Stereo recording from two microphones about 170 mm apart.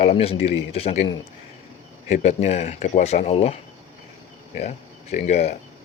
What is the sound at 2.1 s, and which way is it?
Speech, 45° left (ahead or behind).